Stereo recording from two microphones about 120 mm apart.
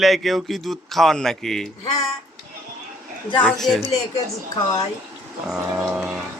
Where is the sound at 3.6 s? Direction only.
Centre (ahead or behind).